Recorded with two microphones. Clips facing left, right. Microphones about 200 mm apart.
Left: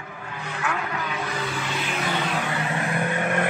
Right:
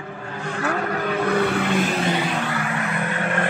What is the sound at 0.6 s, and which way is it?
Vehicle, 40° right (ahead or behind).